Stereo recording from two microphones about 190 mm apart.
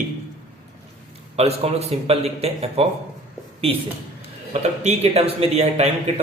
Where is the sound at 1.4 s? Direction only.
35° right (ahead or behind).